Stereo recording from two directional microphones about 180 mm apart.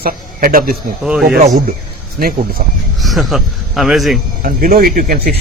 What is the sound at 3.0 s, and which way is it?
Speech, centre (ahead or behind).